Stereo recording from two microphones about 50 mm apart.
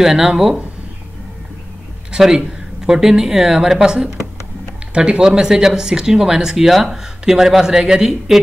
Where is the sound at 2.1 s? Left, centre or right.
Centre.